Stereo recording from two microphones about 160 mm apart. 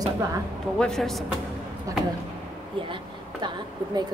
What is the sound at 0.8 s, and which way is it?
Speech, centre (ahead or behind).